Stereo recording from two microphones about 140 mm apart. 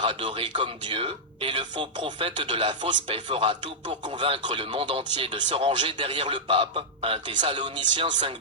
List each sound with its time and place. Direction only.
0.0 s speech: 35° right (ahead or behind)